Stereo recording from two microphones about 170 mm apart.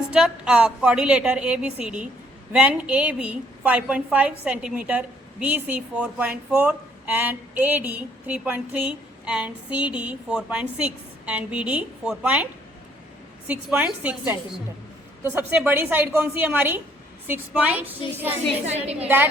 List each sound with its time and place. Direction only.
0.1 s a woman's voice: 5° right (ahead or behind)
13.5 s speech: 5° right (ahead or behind)
18.6 s a woman's voice: 40° right (ahead or behind)
19.0 s speech: 10° right (ahead or behind)